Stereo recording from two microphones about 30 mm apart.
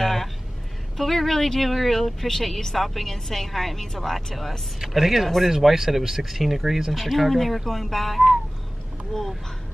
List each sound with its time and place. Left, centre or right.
0.0 s a sound: centre
0.9 s speech: centre
4.7 s speech: centre